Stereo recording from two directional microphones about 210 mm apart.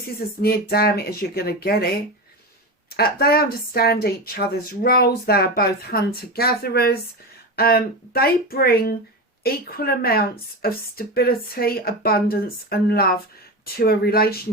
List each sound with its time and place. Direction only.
0.4 s speech: 45° left (ahead or behind)
2.9 s speech: 45° left (ahead or behind)